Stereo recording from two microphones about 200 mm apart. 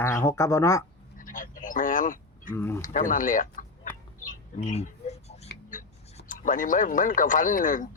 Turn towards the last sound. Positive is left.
turn(degrees=40)  # may be behind; listen again after turning